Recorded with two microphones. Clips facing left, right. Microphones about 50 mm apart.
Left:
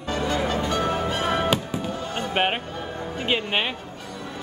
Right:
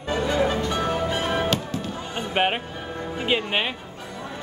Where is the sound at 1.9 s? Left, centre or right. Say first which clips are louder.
Left 2 dB; centre.